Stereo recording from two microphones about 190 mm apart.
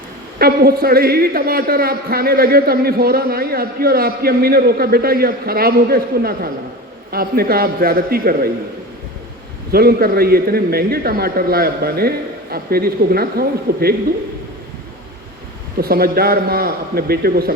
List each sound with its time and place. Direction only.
0.3 s a man's voice: 55° right (ahead or behind)
9.7 s a man's voice: 55° right (ahead or behind)
15.8 s a man's voice: 55° right (ahead or behind)